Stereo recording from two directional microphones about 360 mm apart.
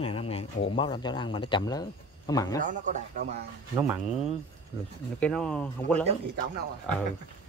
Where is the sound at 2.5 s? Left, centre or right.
Right.